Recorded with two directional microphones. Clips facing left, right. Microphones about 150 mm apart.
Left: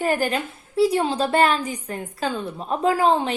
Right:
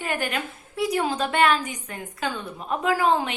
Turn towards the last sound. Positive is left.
turn(degrees=30)  # may be behind; listen again after turning